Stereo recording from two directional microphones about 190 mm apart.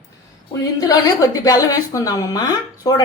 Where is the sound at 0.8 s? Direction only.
20° left (ahead or behind).